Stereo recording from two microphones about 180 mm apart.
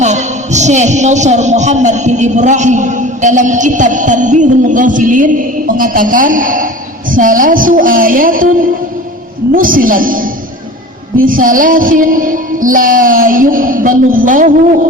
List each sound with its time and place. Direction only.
0.0 s a man's voice: 40° right (ahead or behind)
7.1 s music: 50° right (ahead or behind)